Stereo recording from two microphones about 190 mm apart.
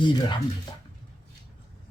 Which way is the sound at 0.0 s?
25° left (ahead or behind).